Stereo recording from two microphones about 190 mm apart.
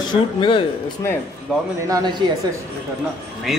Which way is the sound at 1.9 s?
25° right (ahead or behind).